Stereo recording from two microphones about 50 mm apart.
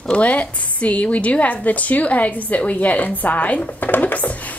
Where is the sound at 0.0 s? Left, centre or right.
Left.